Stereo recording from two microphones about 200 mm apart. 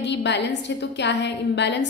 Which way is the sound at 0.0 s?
60° left (ahead or behind).